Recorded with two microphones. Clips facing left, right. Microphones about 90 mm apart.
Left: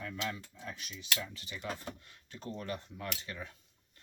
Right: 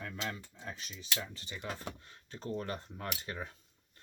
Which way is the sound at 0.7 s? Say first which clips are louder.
Left 1 dB; 35° right (ahead or behind).